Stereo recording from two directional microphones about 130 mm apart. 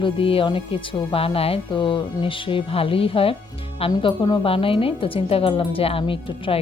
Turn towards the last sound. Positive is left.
turn(degrees=45)  # may be behind; listen again after turning